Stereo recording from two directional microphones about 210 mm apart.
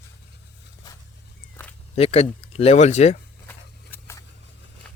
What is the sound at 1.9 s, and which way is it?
Speech, 30° left (ahead or behind).